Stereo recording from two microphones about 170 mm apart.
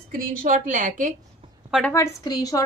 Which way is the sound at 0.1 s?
55° right (ahead or behind).